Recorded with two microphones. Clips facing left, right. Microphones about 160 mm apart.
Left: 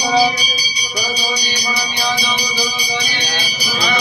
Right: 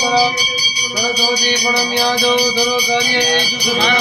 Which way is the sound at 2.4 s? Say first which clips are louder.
Right 8 dB; 60° right (ahead or behind).